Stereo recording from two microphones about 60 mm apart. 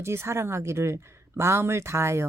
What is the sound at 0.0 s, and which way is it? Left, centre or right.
Speech, right.